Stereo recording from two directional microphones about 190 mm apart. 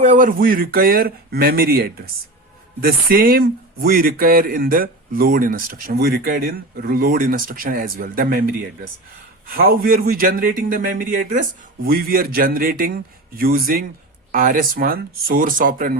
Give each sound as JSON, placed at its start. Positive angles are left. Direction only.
{"t": 0.0, "sound": "speech", "side_deg": -45}
{"t": 9.6, "sound": "speech", "side_deg": -50}